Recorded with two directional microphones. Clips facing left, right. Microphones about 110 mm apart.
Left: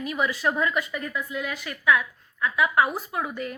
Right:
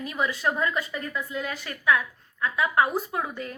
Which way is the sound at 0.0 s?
30° right (ahead or behind).